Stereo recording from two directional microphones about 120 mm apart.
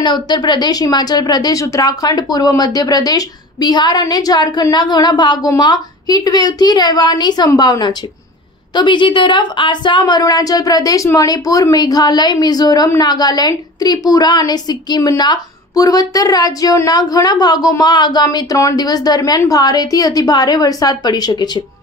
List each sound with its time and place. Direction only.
0.0 s a woman's voice: 40° left (ahead or behind)